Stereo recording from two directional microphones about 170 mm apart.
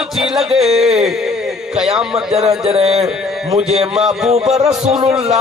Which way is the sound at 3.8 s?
5° right (ahead or behind).